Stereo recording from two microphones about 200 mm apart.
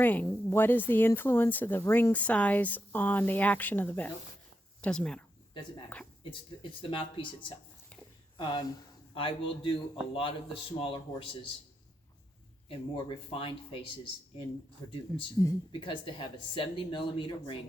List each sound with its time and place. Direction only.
0.0 s speech: 10° left (ahead or behind)
6.6 s speech: 25° left (ahead or behind)
13.3 s speech: 25° left (ahead or behind)